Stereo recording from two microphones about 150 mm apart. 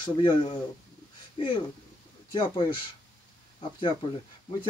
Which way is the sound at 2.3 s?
30° left (ahead or behind).